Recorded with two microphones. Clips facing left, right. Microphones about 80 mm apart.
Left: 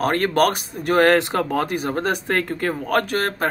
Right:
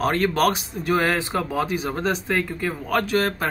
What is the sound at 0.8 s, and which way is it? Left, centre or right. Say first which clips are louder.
Speech: left 6 dB; left.